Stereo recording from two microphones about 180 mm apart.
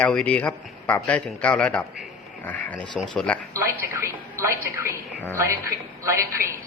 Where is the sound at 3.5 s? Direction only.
15° right (ahead or behind).